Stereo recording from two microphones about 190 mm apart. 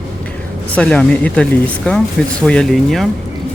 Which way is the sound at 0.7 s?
5° left (ahead or behind).